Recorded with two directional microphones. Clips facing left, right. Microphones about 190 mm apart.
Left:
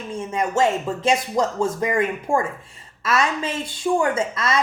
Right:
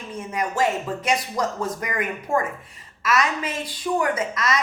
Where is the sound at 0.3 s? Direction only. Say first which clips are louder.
Left 3 dB; 25° left (ahead or behind).